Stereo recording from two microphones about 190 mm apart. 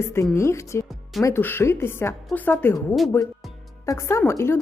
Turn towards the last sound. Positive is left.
turn(degrees=15)  # may be behind; listen again after turning